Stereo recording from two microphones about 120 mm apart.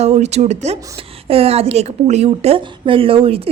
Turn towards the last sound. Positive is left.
turn(degrees=-55)  # may be behind; listen again after turning